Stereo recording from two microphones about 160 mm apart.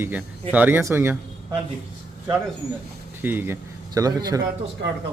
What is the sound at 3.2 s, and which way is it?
Speech, 15° right (ahead or behind).